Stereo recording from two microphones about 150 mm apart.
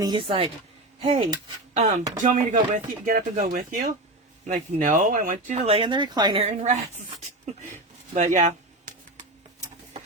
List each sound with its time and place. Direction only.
0.0 s speech: 35° right (ahead or behind); by 5.5 s 60° right (ahead or behind)
5.5 s speech: 40° right (ahead or behind)
6.4 s speech: 45° right (ahead or behind)
8.1 s a sound: 50° right (ahead or behind)